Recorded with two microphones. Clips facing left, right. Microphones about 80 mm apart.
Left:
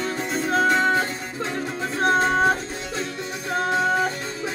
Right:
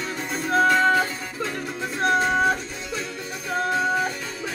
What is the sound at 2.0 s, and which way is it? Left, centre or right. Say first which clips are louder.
Music: left 1 dB; left.